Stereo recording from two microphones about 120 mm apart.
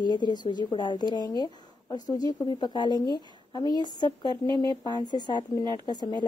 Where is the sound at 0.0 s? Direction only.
40° left (ahead or behind).